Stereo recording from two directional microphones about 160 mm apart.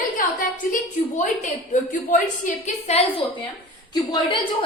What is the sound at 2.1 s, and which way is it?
Speech, 45° left (ahead or behind).